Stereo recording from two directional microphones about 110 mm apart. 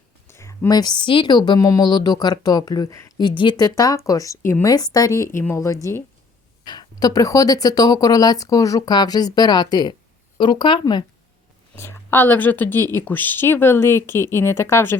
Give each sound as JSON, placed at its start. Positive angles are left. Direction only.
{"t": 0.3, "sound": "a sound", "side_deg": 25}
{"t": 0.7, "sound": "speech", "side_deg": 40}
{"t": 1.5, "sound": "speech", "side_deg": 30}
{"t": 3.8, "sound": "speech", "side_deg": 30}
{"t": 6.7, "sound": "speech", "side_deg": 40}
{"t": 11.8, "sound": "speech", "side_deg": 20}